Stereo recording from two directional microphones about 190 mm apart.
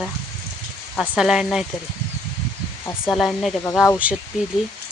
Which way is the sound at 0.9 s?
5° right (ahead or behind).